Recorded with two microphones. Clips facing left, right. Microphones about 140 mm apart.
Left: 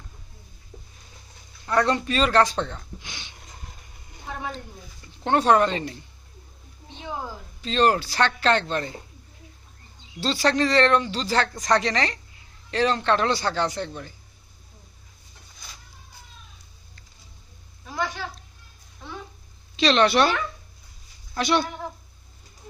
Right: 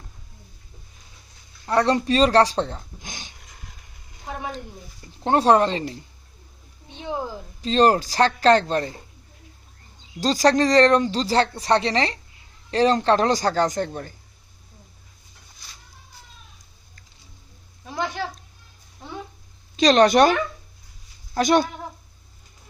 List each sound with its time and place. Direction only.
1.6 s speech: 35° right (ahead or behind)
5.2 s speech: 35° right (ahead or behind)
7.6 s speech: 35° right (ahead or behind)
10.2 s speech: 40° right (ahead or behind)
17.8 s a sound: 20° right (ahead or behind)
19.7 s speech: 40° right (ahead or behind)